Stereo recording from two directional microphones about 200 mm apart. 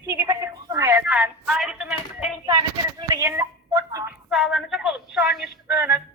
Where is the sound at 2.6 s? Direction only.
20° right (ahead or behind).